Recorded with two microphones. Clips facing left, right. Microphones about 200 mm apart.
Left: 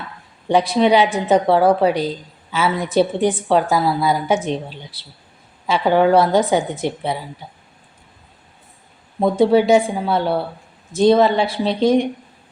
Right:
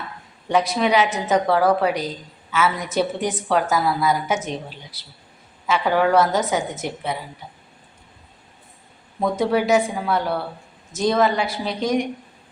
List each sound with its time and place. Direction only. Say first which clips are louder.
0.4 s a woman's voice: left 5 dB; 30° left (ahead or behind)
5.6 s a woman's voice: left 4 dB; 30° left (ahead or behind)
9.2 s a woman's voice: left 6 dB; 30° left (ahead or behind)